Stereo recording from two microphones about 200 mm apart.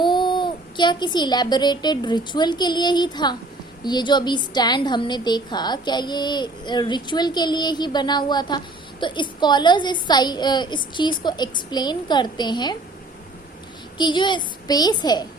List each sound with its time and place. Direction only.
0.0 s a woman's voice: 25° left (ahead or behind)
14.0 s a woman's voice: 25° left (ahead or behind)